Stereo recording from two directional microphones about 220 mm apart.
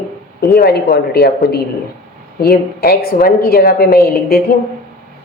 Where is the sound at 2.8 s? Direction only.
45° left (ahead or behind).